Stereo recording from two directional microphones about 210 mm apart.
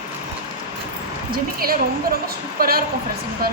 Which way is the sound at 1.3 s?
45° right (ahead or behind).